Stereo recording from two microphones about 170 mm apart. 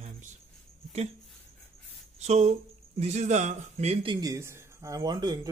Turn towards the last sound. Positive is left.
turn(degrees=-25)  # may be behind; listen again after turning